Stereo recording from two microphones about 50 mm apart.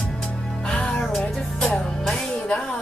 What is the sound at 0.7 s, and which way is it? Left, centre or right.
Music, centre.